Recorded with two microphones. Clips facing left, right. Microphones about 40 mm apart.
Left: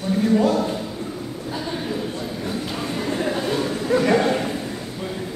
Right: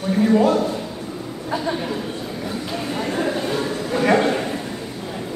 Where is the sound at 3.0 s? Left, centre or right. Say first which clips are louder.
Even; centre.